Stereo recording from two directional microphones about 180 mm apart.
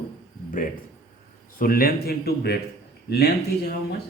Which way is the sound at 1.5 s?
55° left (ahead or behind).